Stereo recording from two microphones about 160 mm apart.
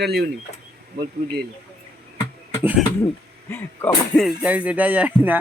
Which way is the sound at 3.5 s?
10° left (ahead or behind).